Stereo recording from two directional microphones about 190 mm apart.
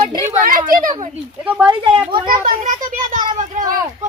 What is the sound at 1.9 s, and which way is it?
Speech, 25° right (ahead or behind).